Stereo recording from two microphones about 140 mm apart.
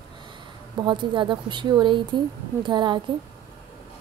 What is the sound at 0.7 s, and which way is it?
A woman's voice, 35° right (ahead or behind).